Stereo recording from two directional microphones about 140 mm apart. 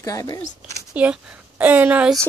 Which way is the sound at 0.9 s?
10° right (ahead or behind).